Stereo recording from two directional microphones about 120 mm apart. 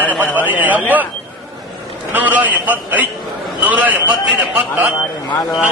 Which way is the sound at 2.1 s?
15° right (ahead or behind).